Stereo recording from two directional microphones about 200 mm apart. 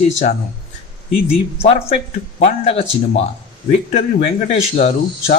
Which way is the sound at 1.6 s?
30° left (ahead or behind).